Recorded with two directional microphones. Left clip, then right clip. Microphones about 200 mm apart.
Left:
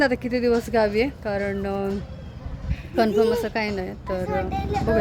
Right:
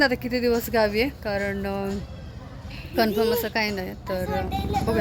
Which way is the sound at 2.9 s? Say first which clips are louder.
Left 2 dB; 5° left (ahead or behind).